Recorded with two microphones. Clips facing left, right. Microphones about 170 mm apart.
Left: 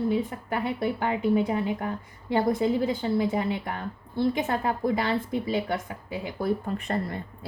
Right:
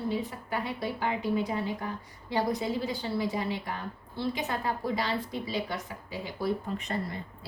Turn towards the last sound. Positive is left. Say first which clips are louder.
# left 4 dB
turn(degrees=55)  # may be behind; listen again after turning